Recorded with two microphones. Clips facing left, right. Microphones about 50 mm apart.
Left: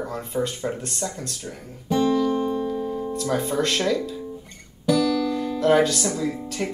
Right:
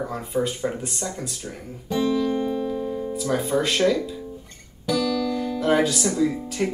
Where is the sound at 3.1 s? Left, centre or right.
Centre.